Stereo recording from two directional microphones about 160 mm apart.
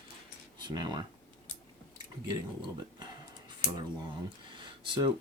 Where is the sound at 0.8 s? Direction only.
25° right (ahead or behind).